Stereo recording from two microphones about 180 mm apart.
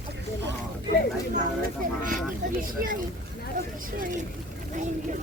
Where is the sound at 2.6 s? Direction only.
50° right (ahead or behind).